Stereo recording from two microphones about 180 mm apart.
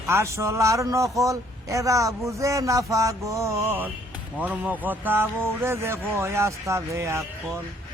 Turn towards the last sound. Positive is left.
turn(degrees=-15)  # may be behind; listen again after turning